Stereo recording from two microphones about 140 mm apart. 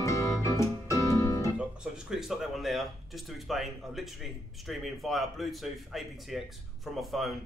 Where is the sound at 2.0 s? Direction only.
5° right (ahead or behind).